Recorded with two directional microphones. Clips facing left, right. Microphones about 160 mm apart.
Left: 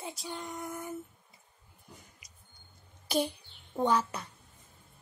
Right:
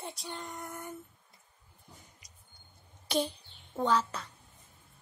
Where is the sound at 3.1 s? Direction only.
10° left (ahead or behind).